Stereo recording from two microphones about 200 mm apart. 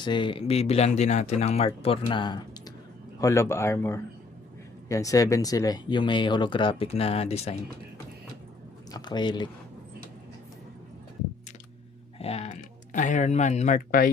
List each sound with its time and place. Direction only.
0.0 s speech: 25° left (ahead or behind)
8.9 s speech: 20° left (ahead or behind)
12.2 s speech: 30° left (ahead or behind)